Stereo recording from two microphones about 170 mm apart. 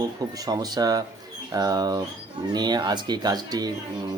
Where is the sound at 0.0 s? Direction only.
20° right (ahead or behind).